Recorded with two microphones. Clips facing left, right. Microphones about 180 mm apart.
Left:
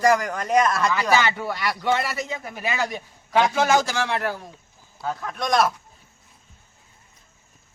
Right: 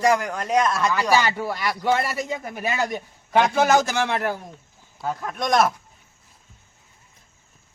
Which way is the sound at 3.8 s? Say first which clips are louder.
Right 2 dB; 20° right (ahead or behind).